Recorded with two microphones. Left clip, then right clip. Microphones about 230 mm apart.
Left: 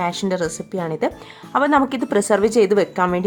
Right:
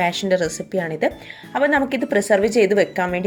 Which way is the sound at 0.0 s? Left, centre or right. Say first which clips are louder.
Right 3 dB; centre.